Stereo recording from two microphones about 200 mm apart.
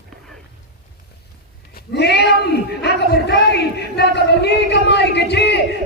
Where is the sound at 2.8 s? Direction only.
55° left (ahead or behind).